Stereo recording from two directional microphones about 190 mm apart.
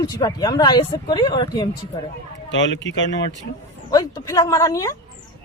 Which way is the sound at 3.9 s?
20° left (ahead or behind).